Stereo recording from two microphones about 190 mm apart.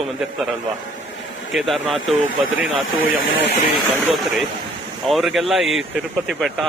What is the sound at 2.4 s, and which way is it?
Speech, 90° right.